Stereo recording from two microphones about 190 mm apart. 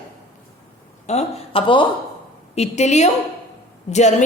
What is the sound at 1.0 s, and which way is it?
A woman's voice, 30° left (ahead or behind).